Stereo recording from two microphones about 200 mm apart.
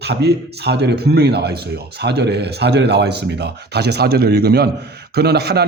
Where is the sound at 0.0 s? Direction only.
55° right (ahead or behind).